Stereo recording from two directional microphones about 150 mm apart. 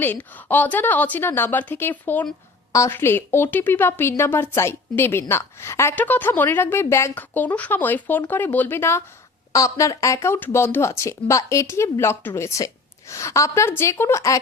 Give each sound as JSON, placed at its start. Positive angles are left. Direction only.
{"t": 0.0, "sound": "a woman's voice", "side_deg": 10}